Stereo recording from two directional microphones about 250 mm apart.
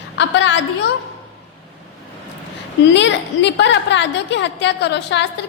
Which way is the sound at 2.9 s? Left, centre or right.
Left.